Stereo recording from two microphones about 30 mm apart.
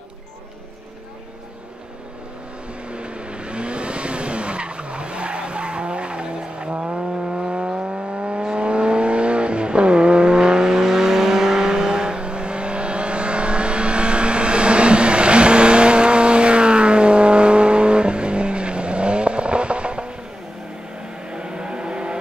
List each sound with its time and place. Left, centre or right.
2.9 s vehicle: right
6.8 s a sound: right
21.3 s vehicle: right